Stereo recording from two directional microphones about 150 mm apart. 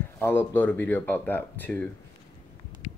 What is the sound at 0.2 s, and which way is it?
Speech, 15° left (ahead or behind).